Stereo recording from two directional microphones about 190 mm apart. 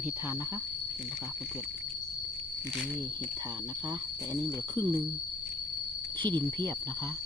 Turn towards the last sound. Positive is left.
turn(degrees=-20)  # may be behind; listen again after turning